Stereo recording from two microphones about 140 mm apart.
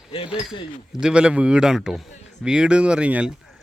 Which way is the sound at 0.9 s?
5° right (ahead or behind).